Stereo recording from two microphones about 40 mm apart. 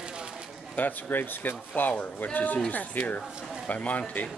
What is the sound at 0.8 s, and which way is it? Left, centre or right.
A man's voice, left.